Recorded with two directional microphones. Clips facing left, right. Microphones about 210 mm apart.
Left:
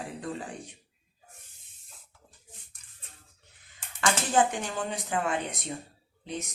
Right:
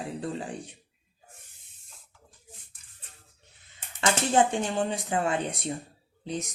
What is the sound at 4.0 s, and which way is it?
Speech, 25° right (ahead or behind).